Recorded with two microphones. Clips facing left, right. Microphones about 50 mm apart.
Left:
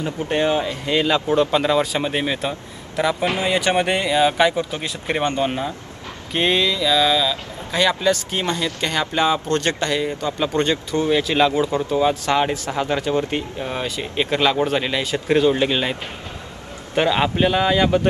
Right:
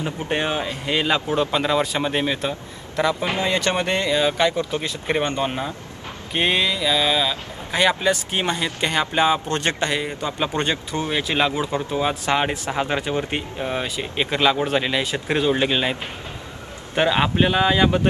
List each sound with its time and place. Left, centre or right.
0.0 s speech: right; by 5.2 s centre
6.3 s speech: centre
13.6 s speech: centre